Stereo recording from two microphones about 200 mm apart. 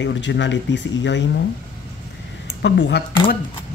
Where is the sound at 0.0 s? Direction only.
65° left (ahead or behind).